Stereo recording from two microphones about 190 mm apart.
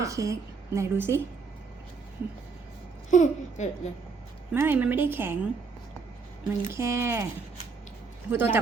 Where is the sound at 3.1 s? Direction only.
40° left (ahead or behind).